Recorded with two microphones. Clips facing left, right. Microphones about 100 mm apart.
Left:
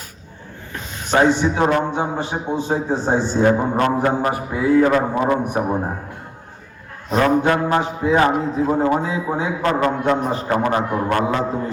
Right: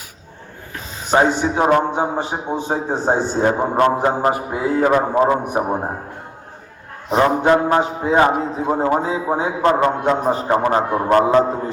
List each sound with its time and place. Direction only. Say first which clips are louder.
1.2 s a man's voice: left 2 dB; 15° right (ahead or behind)
2.9 s a man's voice: right 2 dB; 45° right (ahead or behind)
3.4 s a man's voice: right 2 dB; 15° right (ahead or behind)
7.1 s a man's voice: right 2 dB; 20° right (ahead or behind)